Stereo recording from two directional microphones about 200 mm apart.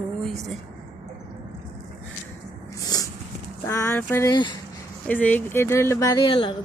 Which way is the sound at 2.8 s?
20° left (ahead or behind).